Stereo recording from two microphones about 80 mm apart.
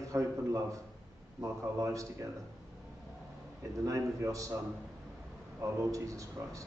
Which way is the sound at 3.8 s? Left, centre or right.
Right.